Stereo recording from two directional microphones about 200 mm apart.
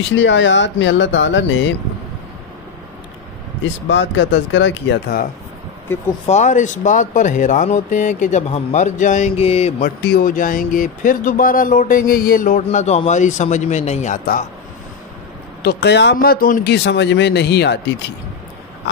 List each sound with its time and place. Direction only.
0.1 s speech: 70° left (ahead or behind)
3.8 s speech: 65° left (ahead or behind)
6.2 s speech: 35° left (ahead or behind)
12.6 s speech: 35° left (ahead or behind)
15.6 s speech: 55° left (ahead or behind)